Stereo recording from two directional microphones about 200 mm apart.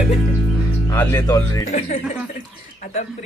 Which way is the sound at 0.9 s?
15° left (ahead or behind).